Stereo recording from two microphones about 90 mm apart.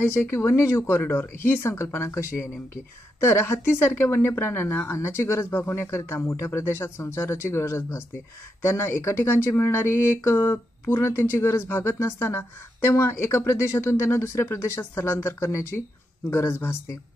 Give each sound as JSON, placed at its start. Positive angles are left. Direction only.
{"t": 0.0, "sound": "speech", "side_deg": 25}